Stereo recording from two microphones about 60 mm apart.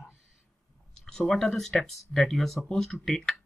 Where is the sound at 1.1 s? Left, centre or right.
Centre.